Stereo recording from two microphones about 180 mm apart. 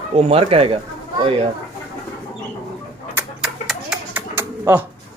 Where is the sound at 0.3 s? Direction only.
35° right (ahead or behind).